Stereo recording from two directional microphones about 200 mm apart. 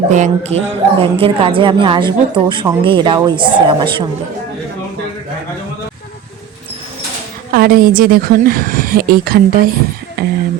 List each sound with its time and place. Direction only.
0.1 s a woman's voice: 35° right (ahead or behind)
7.5 s speech: 45° right (ahead or behind)